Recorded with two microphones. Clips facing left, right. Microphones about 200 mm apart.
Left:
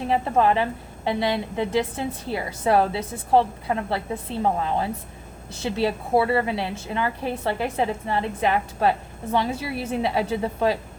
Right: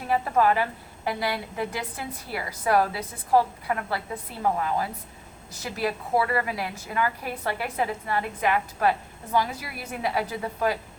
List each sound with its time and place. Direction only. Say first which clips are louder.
0.1 s a woman's voice: left 1 dB; 25° left (ahead or behind)